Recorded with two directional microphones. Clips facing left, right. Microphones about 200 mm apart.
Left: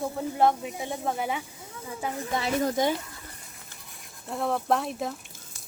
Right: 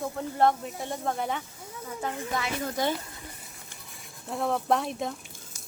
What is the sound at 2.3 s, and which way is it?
Speech, 35° left (ahead or behind).